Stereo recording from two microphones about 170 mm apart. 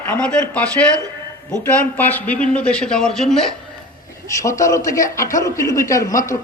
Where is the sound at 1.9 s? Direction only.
10° left (ahead or behind).